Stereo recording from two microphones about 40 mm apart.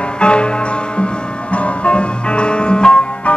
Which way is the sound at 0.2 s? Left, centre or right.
Left.